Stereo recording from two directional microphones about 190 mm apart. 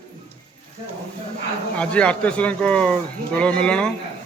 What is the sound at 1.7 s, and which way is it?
Speech, 5° left (ahead or behind).